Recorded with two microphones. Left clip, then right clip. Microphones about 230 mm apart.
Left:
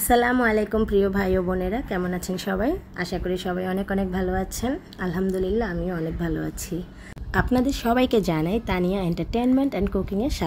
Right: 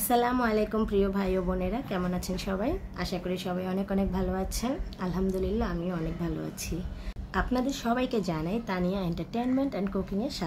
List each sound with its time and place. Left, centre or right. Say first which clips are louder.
0.1 s a woman's voice: left 6 dB; left
7.3 s a woman's voice: left 7 dB; left